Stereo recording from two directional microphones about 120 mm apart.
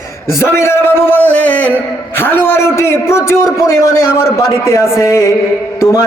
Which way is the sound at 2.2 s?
20° left (ahead or behind).